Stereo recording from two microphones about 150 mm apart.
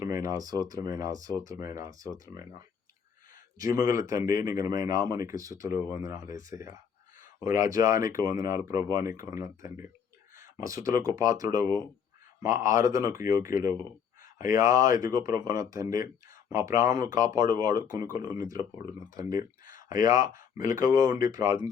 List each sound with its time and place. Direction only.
0.0 s speech: 20° right (ahead or behind)
3.6 s speech: 20° right (ahead or behind)
19.4 s a sound: 65° left (ahead or behind)
20.1 s speech: 25° right (ahead or behind)
20.3 s speech: 65° left (ahead or behind)
20.8 s speech: 25° right (ahead or behind)